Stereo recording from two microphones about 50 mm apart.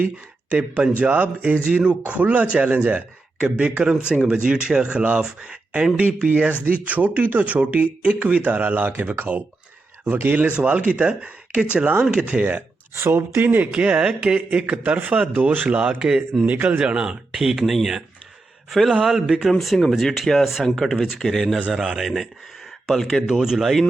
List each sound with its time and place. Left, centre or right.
0.5 s speech: right
6.8 s speech: right
13.1 s speech: right
13.7 s speech: right
16.0 s speech: centre
16.5 s speech: right
16.7 s speech: centre
22.0 s speech: centre
23.2 s speech: centre